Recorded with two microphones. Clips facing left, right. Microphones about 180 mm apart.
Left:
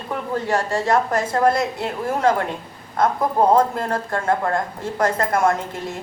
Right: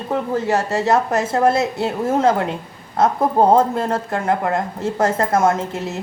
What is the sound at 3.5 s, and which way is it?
A woman's voice, 25° right (ahead or behind).